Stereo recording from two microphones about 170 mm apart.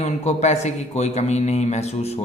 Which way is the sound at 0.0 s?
40° left (ahead or behind).